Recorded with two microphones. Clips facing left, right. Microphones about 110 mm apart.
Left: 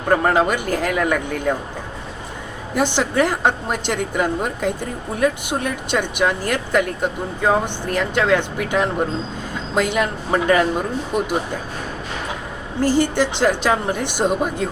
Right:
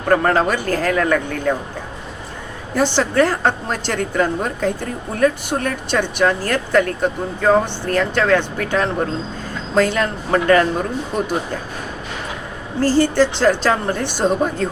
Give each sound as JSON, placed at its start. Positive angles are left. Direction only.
{"t": 0.1, "sound": "a woman's voice", "side_deg": 10}
{"t": 2.7, "sound": "a woman's voice", "side_deg": 15}
{"t": 12.8, "sound": "a woman's voice", "side_deg": 15}